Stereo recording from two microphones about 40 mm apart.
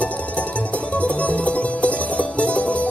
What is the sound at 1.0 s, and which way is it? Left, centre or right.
Music, left.